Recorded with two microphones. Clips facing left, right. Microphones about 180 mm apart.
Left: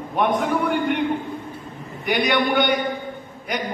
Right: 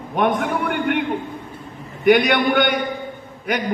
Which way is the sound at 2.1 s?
60° right (ahead or behind).